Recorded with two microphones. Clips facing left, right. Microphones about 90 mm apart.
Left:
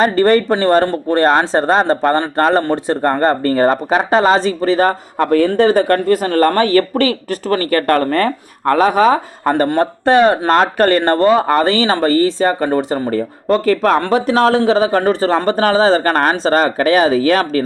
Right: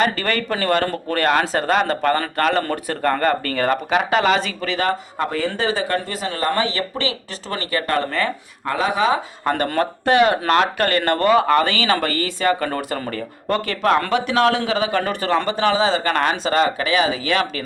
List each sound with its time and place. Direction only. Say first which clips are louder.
0.0 s speech: left 9 dB; 35° left (ahead or behind)
5.3 s speech: left 12 dB; 60° left (ahead or behind); by 17.6 s 40° left (ahead or behind)